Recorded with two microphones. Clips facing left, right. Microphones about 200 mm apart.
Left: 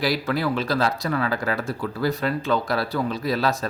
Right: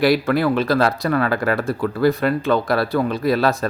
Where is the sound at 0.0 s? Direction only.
60° right (ahead or behind).